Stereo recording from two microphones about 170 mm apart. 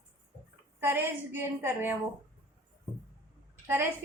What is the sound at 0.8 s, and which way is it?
A woman's voice, 15° right (ahead or behind).